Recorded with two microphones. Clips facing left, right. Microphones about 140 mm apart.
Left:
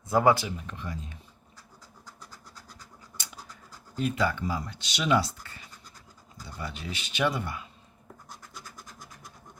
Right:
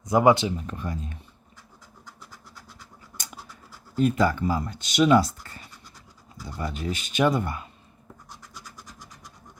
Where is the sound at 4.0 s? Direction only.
45° right (ahead or behind).